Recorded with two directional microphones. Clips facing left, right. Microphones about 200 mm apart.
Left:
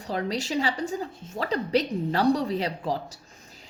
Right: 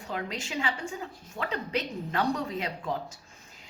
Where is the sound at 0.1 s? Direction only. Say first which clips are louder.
Left 7 dB; 35° left (ahead or behind).